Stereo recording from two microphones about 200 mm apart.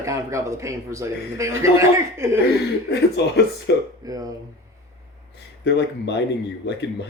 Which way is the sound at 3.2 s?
60° left (ahead or behind).